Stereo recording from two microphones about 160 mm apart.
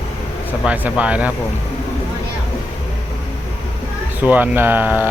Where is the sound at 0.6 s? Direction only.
10° right (ahead or behind).